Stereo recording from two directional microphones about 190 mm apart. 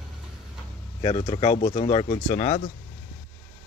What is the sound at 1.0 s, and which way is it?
Speech, 30° left (ahead or behind).